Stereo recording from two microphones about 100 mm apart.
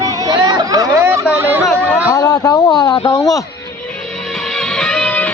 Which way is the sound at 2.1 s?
40° left (ahead or behind).